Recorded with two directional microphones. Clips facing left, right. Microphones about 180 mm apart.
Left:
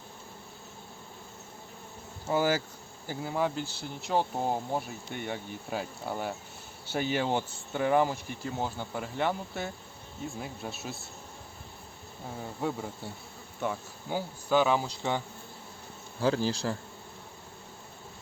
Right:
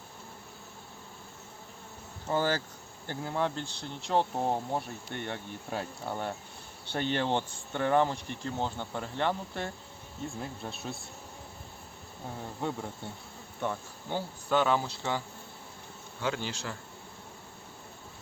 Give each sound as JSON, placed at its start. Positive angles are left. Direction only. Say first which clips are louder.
{"t": 2.2, "sound": "speech", "louder": "left 2 dB", "side_deg": 10}
{"t": 12.4, "sound": "speech", "louder": "left 2 dB", "side_deg": 5}
{"t": 16.2, "sound": "speech", "louder": "left 6 dB", "side_deg": 35}